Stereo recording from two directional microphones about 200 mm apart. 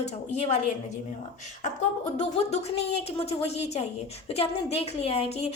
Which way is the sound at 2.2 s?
35° left (ahead or behind).